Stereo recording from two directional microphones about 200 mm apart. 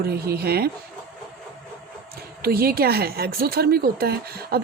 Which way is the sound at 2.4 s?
50° right (ahead or behind).